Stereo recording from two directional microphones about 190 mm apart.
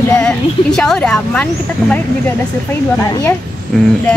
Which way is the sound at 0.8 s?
5° left (ahead or behind).